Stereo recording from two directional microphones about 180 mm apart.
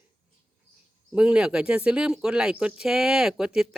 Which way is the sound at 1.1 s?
5° right (ahead or behind).